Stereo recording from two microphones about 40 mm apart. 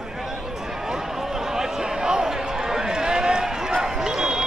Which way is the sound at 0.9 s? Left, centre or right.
Centre.